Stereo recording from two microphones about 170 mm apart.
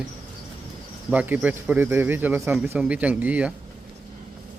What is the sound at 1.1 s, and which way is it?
Speech, 10° right (ahead or behind).